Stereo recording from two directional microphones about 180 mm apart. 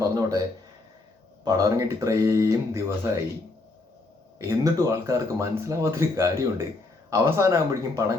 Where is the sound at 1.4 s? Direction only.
20° right (ahead or behind).